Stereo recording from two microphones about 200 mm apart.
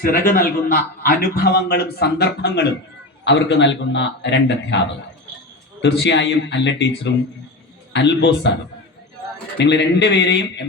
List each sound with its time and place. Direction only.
0.0 s a man's voice: 45° left (ahead or behind); by 4.8 s 60° left (ahead or behind)
5.8 s a man's voice: 65° left (ahead or behind)
9.6 s a man's voice: 60° left (ahead or behind)